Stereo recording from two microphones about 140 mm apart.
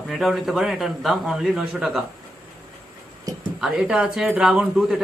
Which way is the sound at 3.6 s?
5° right (ahead or behind).